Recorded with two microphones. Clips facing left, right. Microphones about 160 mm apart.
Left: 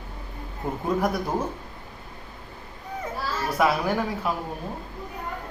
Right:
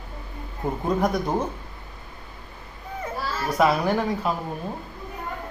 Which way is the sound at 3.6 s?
Centre (ahead or behind).